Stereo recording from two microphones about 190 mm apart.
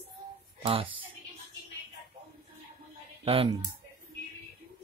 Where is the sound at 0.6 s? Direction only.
30° right (ahead or behind).